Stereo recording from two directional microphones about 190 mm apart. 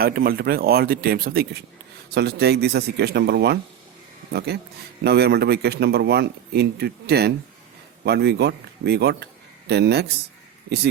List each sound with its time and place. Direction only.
0.0 s a man's voice: 50° right (ahead or behind)